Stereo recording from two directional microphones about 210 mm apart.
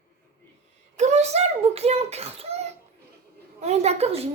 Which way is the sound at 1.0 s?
35° right (ahead or behind).